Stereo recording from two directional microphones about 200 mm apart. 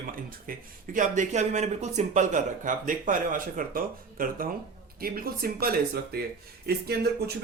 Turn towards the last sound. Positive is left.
turn(degrees=-55)  # may be behind; listen again after turning